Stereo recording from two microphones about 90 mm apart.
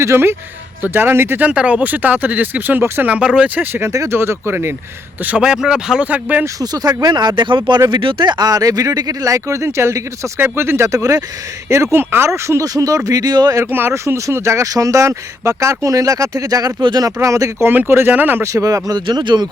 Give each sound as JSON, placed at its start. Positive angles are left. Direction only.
{"t": 0.0, "sound": "speech", "side_deg": -30}
{"t": 1.5, "sound": "speech", "side_deg": -15}
{"t": 5.2, "sound": "speech", "side_deg": -15}
{"t": 6.6, "sound": "speech", "side_deg": -45}
{"t": 13.7, "sound": "speech", "side_deg": -25}
{"t": 18.4, "sound": "speech", "side_deg": -40}
{"t": 19.0, "sound": "speech", "side_deg": -60}